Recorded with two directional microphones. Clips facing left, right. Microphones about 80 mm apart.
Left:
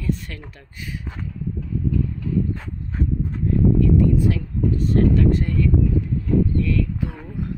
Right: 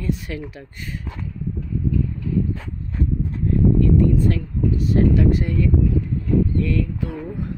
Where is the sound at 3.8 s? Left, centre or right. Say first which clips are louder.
Even; centre.